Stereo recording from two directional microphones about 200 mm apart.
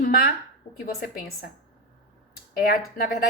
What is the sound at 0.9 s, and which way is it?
Speech, 50° left (ahead or behind).